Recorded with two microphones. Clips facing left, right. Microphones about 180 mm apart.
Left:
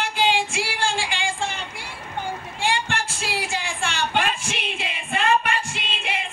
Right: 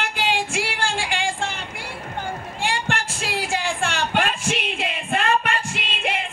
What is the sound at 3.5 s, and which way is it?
Music, 60° right (ahead or behind).